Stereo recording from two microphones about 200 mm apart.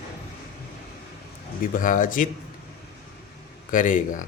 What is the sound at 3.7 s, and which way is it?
Speech, 40° left (ahead or behind).